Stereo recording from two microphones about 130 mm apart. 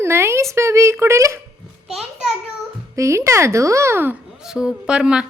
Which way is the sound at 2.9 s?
25° right (ahead or behind).